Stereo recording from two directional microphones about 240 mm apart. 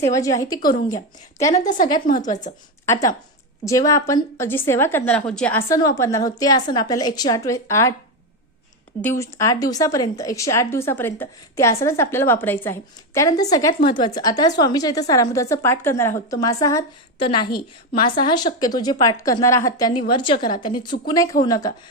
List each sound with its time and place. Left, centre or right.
0.1 s a woman's voice: centre
1.5 s speech: left
2.8 s a woman's voice: centre
9.0 s a woman's voice: centre